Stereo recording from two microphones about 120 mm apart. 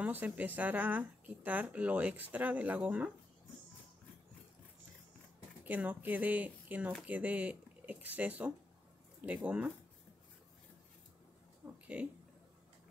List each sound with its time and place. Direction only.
0.0 s speech: 15° right (ahead or behind)
5.6 s speech: 15° right (ahead or behind)
11.6 s a sound: 20° right (ahead or behind)